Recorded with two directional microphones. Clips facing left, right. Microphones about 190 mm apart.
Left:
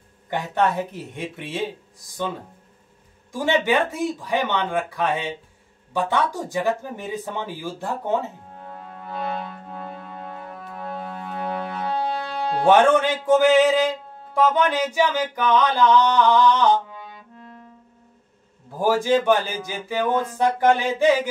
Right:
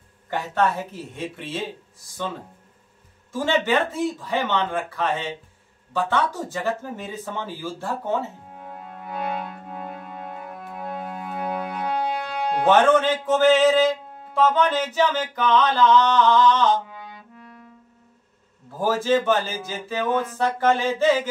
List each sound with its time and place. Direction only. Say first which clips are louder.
0.3 s music: left 1 dB; 15° left (ahead or behind)
3.3 s music: left 1 dB; 15° left (ahead or behind)
8.5 s music: even; 10° right (ahead or behind)
12.6 s music: left 1 dB; 15° left (ahead or behind)
18.8 s music: left 2 dB; 15° left (ahead or behind)